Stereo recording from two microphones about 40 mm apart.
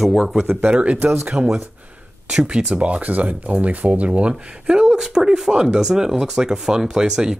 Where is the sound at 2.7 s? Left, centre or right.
Right.